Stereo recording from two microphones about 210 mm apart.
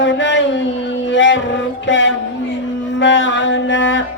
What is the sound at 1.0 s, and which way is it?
Music, 60° left (ahead or behind).